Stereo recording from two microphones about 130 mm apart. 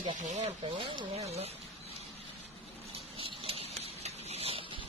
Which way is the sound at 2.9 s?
45° right (ahead or behind).